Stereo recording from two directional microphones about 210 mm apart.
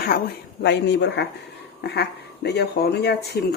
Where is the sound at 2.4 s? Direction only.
55° left (ahead or behind).